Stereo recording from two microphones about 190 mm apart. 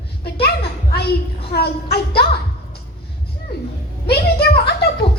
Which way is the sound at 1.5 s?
55° left (ahead or behind).